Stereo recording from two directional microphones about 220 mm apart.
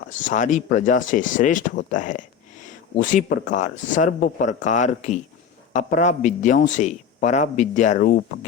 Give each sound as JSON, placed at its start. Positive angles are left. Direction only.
{"t": 0.1, "sound": "a man's voice", "side_deg": 35}